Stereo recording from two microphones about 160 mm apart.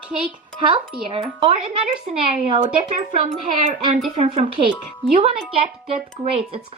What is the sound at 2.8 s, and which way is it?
Speech, 45° right (ahead or behind).